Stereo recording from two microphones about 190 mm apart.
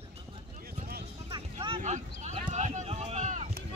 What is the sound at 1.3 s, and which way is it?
Music, 25° right (ahead or behind).